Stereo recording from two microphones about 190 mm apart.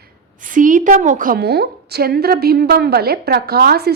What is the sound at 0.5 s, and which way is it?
A woman's voice, 45° right (ahead or behind).